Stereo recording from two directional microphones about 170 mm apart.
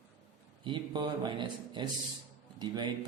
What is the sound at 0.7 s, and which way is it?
A man's voice, 25° right (ahead or behind).